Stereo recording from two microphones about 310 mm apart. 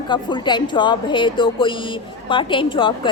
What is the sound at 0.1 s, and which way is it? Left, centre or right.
A woman's voice, centre.